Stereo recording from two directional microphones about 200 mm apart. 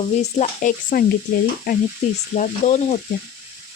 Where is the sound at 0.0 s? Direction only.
30° left (ahead or behind).